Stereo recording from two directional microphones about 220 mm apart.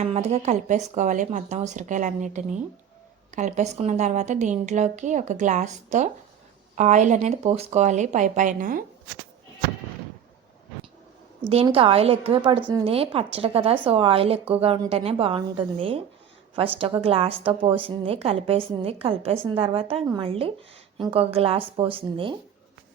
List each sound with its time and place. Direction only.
0.0 s a woman's voice: 30° right (ahead or behind)
11.4 s a woman's voice: 25° right (ahead or behind)